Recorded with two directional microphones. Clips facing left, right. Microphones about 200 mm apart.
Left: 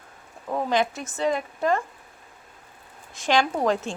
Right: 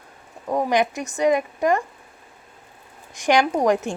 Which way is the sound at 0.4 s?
15° right (ahead or behind).